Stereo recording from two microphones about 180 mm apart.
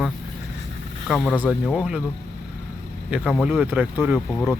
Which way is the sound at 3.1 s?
5° right (ahead or behind).